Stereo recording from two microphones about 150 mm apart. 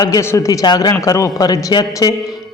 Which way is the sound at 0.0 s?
20° left (ahead or behind).